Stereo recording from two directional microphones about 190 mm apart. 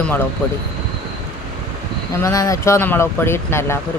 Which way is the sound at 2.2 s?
15° left (ahead or behind).